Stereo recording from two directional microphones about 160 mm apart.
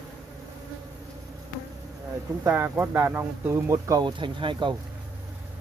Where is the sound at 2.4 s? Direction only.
10° right (ahead or behind); by 4.7 s 30° right (ahead or behind).